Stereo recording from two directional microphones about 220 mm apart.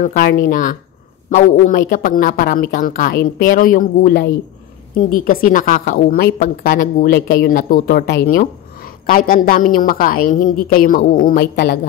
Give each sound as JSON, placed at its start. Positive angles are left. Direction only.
{"t": 0.0, "sound": "a woman's voice", "side_deg": 40}